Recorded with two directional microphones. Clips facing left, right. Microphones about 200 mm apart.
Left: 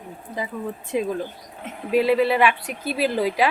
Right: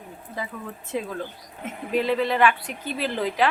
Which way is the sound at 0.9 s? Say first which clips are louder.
Left 5 dB; 15° left (ahead or behind).